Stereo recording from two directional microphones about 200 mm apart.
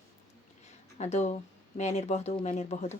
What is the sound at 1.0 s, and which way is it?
Speech, 35° left (ahead or behind).